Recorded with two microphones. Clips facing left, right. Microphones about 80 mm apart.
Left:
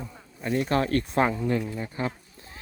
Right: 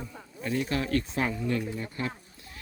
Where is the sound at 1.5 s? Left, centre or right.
Left.